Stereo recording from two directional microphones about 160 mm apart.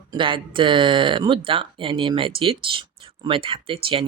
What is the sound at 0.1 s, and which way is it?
Speech, 30° right (ahead or behind).